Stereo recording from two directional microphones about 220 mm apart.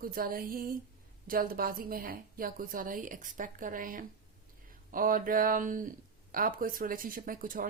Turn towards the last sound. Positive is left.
turn(degrees=-40)  # may be behind; listen again after turning